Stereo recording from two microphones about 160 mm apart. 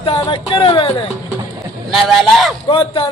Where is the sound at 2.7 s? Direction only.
35° left (ahead or behind).